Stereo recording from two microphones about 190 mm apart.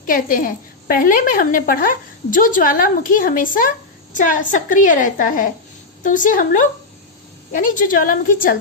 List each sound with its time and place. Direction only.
0.0 s a woman's voice: 45° left (ahead or behind)